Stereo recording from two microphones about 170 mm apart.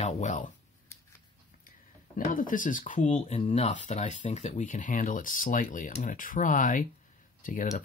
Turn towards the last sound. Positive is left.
turn(degrees=50)  # may be behind; listen again after turning